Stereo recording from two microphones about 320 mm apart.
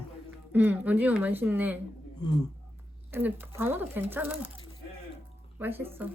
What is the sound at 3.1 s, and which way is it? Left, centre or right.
A woman's voice, centre.